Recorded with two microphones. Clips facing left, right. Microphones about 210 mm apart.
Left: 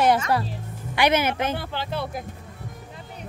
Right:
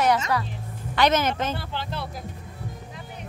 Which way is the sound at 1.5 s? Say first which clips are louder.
Left 3 dB; 55° left (ahead or behind).